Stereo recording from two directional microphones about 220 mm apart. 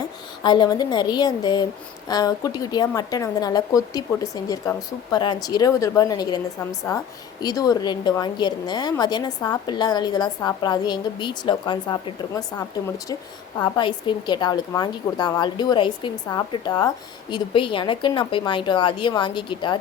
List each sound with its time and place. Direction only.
0.4 s a woman's voice: 20° left (ahead or behind)